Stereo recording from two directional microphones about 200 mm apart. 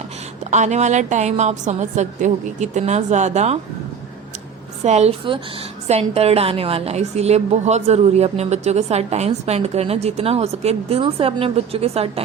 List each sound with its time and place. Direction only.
0.5 s a woman's voice: 35° right (ahead or behind)
4.8 s a woman's voice: 35° right (ahead or behind)